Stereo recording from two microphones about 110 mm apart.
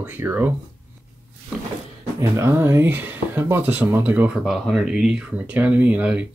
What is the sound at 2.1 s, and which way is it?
Speech, 25° right (ahead or behind).